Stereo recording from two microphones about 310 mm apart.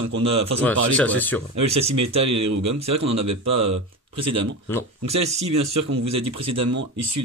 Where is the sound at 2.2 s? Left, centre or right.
Right.